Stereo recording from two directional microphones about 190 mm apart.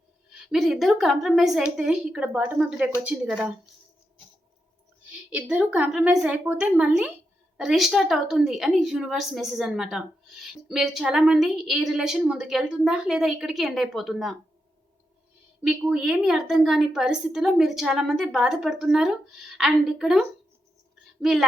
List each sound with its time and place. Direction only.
0.4 s a woman's voice: centre (ahead or behind)
5.1 s a woman's voice: 5° right (ahead or behind)
15.6 s a woman's voice: 5° right (ahead or behind)